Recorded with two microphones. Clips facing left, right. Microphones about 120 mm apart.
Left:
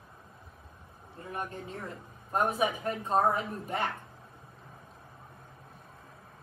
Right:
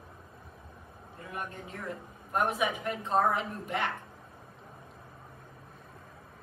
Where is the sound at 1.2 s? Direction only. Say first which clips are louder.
Left 2 dB; 35° left (ahead or behind).